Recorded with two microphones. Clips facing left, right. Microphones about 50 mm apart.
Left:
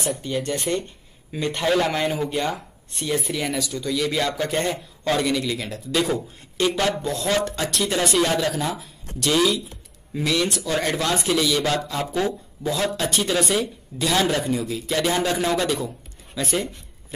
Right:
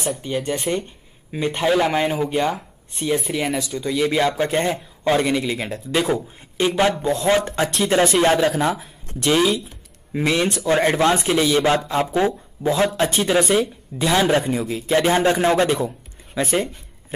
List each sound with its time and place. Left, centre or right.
0.2 s speech: centre